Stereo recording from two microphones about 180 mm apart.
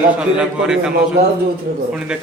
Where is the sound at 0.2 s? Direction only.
5° right (ahead or behind).